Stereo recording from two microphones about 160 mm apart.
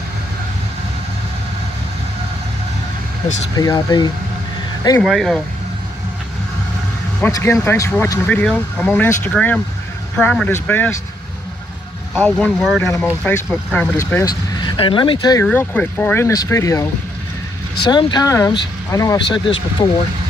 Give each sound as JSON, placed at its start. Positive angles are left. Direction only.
{"t": 3.5, "sound": "speech", "side_deg": 25}
{"t": 5.0, "sound": "speech", "side_deg": 0}
{"t": 7.2, "sound": "speech", "side_deg": 15}
{"t": 12.2, "sound": "speech", "side_deg": 5}
{"t": 13.9, "sound": "speech", "side_deg": 20}
{"t": 15.4, "sound": "speech", "side_deg": 10}
{"t": 17.8, "sound": "speech", "side_deg": 30}